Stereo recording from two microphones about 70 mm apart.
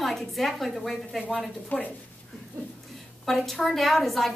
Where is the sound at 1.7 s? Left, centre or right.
Left.